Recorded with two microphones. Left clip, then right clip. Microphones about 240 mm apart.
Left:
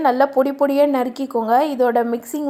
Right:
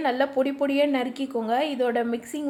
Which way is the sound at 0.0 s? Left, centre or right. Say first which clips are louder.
Left 8 dB; left.